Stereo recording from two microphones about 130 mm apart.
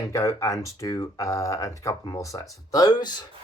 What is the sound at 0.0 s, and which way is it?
Speech, 25° left (ahead or behind).